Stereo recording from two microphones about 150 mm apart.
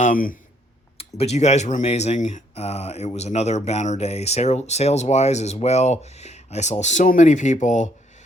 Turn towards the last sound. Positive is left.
turn(degrees=55)  # may be behind; listen again after turning